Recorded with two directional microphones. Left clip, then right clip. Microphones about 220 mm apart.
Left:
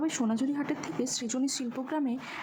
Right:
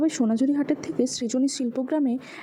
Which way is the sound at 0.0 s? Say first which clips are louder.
Right 7 dB; 15° right (ahead or behind).